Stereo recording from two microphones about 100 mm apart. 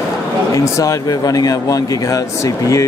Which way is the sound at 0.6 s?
35° left (ahead or behind).